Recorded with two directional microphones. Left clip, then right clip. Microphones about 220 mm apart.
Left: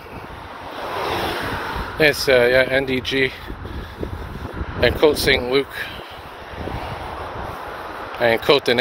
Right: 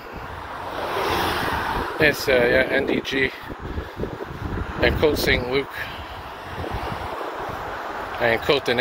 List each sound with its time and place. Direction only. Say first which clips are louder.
0.9 s vehicle: even; 55° right (ahead or behind)
2.0 s speech: left 4 dB; 30° left (ahead or behind)
4.7 s speech: left 4 dB; 35° left (ahead or behind)
8.2 s speech: left 4 dB; 35° left (ahead or behind)